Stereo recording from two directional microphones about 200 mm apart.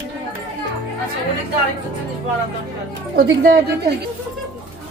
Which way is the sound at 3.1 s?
50° right (ahead or behind).